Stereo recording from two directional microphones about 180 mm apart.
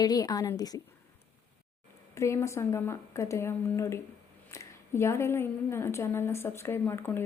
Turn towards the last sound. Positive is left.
turn(degrees=15)  # may be behind; listen again after turning